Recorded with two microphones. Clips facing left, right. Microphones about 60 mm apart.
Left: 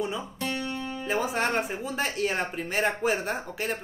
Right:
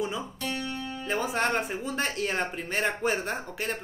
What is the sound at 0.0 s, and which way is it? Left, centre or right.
Speech, centre.